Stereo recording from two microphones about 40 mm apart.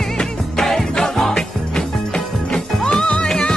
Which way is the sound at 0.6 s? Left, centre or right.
Centre.